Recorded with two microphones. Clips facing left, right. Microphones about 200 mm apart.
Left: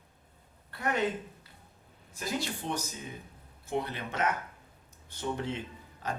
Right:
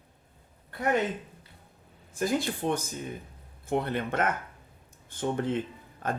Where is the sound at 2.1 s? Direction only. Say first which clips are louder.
Right 7 dB; 50° right (ahead or behind).